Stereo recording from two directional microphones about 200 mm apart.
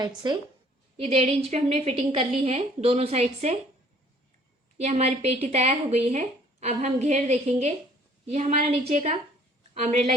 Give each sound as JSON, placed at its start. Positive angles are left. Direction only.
{"t": 0.2, "sound": "speech", "side_deg": -20}
{"t": 4.8, "sound": "speech", "side_deg": -30}